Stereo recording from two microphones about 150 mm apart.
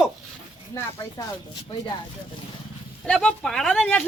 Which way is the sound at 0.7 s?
20° left (ahead or behind).